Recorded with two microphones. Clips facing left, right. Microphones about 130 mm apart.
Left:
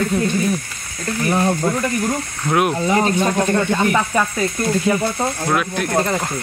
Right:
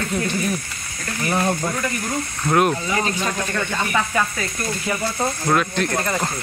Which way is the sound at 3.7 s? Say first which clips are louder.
Left 5 dB; 15° left (ahead or behind).